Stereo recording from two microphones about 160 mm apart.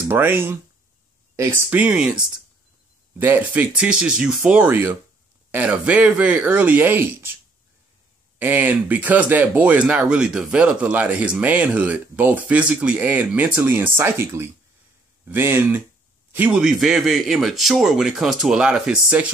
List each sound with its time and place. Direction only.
0.1 s speech: 15° right (ahead or behind)
8.4 s a man's voice: 10° right (ahead or behind)